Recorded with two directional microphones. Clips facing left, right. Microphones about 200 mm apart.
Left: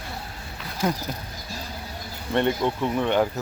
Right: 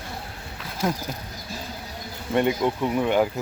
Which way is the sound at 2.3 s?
10° right (ahead or behind).